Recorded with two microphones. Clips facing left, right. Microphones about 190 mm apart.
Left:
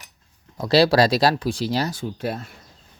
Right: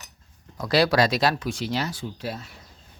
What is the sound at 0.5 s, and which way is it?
Speech, 30° left (ahead or behind).